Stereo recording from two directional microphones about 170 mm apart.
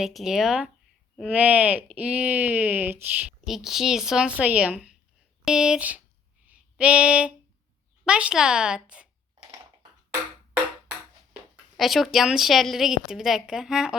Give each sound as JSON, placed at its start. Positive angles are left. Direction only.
{"t": 0.0, "sound": "a woman's voice", "side_deg": 0}
{"t": 6.4, "sound": "a sound", "side_deg": -5}
{"t": 8.0, "sound": "a woman's voice", "side_deg": -5}
{"t": 10.1, "sound": "music", "side_deg": -10}
{"t": 11.8, "sound": "a woman's voice", "side_deg": 0}